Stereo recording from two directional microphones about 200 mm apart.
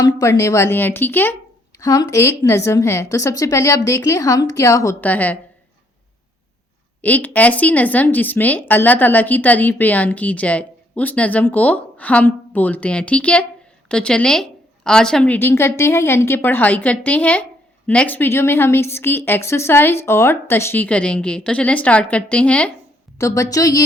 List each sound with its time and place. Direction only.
0.0 s speech: 15° left (ahead or behind)
7.0 s speech: 10° left (ahead or behind)